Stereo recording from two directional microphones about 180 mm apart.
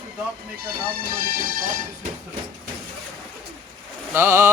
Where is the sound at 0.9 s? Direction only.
55° right (ahead or behind).